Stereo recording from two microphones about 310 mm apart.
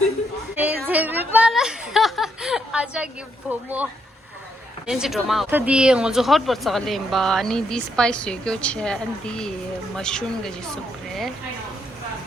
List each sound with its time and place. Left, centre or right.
0.6 s a sound: centre
3.5 s speech: centre
4.9 s speech: centre